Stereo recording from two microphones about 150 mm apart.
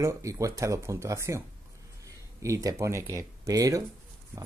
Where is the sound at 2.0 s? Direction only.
20° right (ahead or behind).